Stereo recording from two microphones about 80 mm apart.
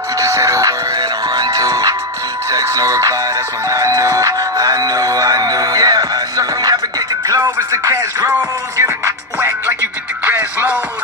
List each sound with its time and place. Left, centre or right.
0.2 s music: right